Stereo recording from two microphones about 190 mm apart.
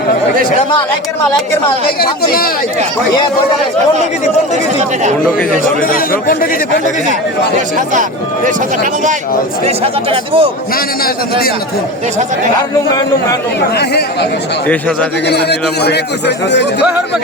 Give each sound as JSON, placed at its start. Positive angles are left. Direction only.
{"t": 5.9, "sound": "speech", "side_deg": 50}
{"t": 8.4, "sound": "speech", "side_deg": -40}
{"t": 9.6, "sound": "speech", "side_deg": -30}
{"t": 11.0, "sound": "speech", "side_deg": 55}
{"t": 13.7, "sound": "a man's voice", "side_deg": 60}
{"t": 15.3, "sound": "a man's voice", "side_deg": 60}